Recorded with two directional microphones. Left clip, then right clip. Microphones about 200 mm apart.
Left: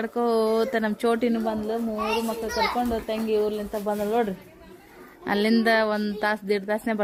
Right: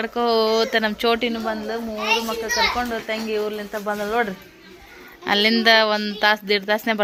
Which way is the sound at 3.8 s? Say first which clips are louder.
Right 3 dB; 20° left (ahead or behind).